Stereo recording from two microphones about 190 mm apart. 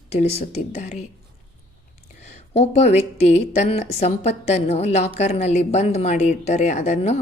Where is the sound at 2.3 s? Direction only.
35° left (ahead or behind).